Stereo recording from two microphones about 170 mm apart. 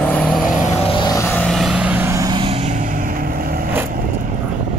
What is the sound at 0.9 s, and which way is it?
Vehicle, 25° left (ahead or behind).